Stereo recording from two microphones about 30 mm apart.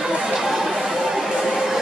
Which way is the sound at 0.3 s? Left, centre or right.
Centre.